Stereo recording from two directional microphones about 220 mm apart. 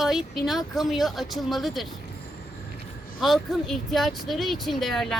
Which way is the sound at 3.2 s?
Centre (ahead or behind).